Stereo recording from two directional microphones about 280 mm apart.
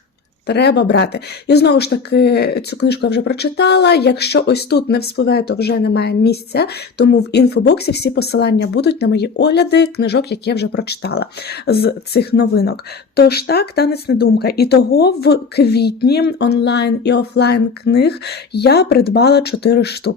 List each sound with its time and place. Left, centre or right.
0.4 s speech: left